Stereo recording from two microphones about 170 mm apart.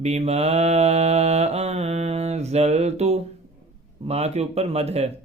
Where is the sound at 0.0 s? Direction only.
40° right (ahead or behind).